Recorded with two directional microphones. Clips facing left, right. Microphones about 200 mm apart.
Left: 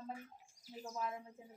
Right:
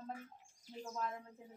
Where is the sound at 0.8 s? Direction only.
5° left (ahead or behind).